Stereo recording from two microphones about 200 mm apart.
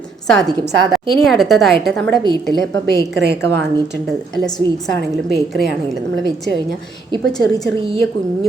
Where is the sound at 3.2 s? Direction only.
60° right (ahead or behind).